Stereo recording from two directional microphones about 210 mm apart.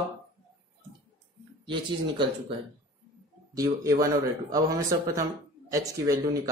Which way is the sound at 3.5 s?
15° right (ahead or behind).